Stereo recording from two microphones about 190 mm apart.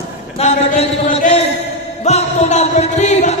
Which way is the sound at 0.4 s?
35° left (ahead or behind).